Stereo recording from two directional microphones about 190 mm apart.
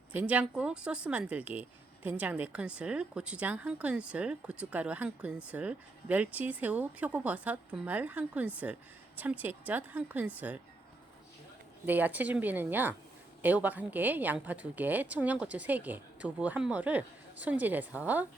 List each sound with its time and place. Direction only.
0.1 s a woman's voice: 5° right (ahead or behind)
11.9 s a woman's voice: 10° right (ahead or behind)